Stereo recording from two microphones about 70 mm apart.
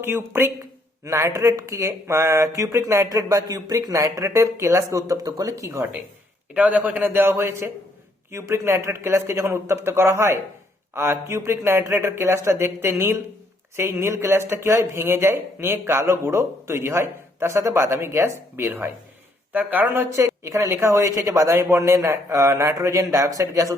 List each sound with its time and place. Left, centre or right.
0.0 s a man's voice: right
1.0 s a man's voice: right
3.1 s a man's voice: right
6.5 s a man's voice: right
19.5 s a man's voice: right
19.9 s a man's voice: right